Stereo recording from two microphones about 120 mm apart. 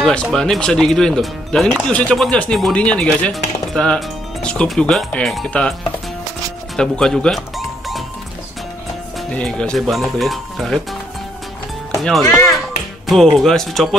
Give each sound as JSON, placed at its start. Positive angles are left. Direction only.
{"t": 0.0, "sound": "speech", "side_deg": 5}
{"t": 2.0, "sound": "chopping", "side_deg": 5}
{"t": 6.8, "sound": "speech", "side_deg": 5}
{"t": 9.3, "sound": "speech", "side_deg": 10}
{"t": 12.0, "sound": "speech", "side_deg": 0}